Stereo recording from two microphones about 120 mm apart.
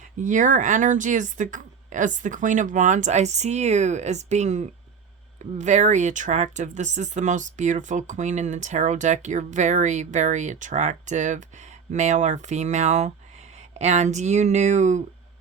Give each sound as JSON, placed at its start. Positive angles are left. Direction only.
{"t": 0.2, "sound": "a woman's voice", "side_deg": -90}
{"t": 11.9, "sound": "speech", "side_deg": -80}